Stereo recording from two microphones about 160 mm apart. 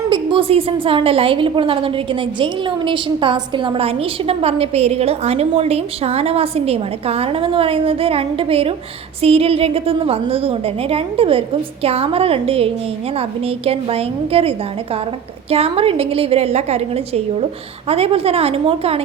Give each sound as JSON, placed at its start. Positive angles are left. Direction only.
{"t": 0.1, "sound": "a woman's voice", "side_deg": -30}